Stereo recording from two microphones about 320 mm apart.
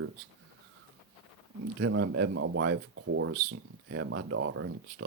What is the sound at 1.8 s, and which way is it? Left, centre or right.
Speech, right.